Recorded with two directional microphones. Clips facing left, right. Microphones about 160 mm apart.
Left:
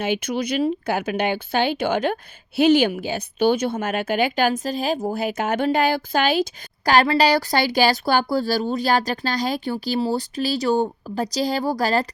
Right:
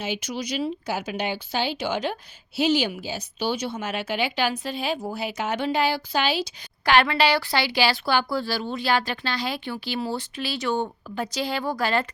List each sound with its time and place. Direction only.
0.0 s speech: 55° left (ahead or behind); by 12.0 s 40° left (ahead or behind)